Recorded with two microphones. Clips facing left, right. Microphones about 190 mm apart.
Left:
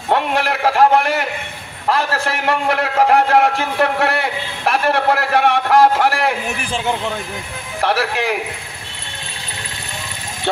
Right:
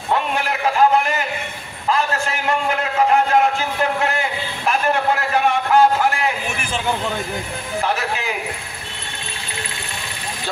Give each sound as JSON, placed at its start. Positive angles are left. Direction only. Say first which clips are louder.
{"t": 0.1, "sound": "a man's voice", "louder": "left 3 dB", "side_deg": 75}
{"t": 7.8, "sound": "a man's voice", "louder": "left 6 dB", "side_deg": 70}